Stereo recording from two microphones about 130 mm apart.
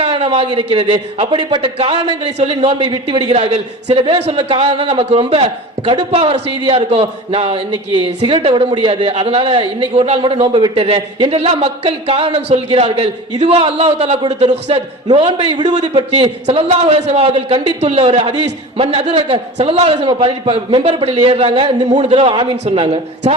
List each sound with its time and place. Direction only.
0.0 s a man's voice: 45° right (ahead or behind)
15.4 s a man's voice: 40° right (ahead or behind)
15.6 s a man's voice: 65° right (ahead or behind)
16.0 s a man's voice: 45° right (ahead or behind)
16.6 s a man's voice: 55° right (ahead or behind); by 19.4 s 40° right (ahead or behind)
19.5 s a man's voice: 55° right (ahead or behind)
20.1 s a man's voice: 40° right (ahead or behind)
21.8 s a man's voice: 65° right (ahead or behind)
22.1 s a man's voice: 40° right (ahead or behind)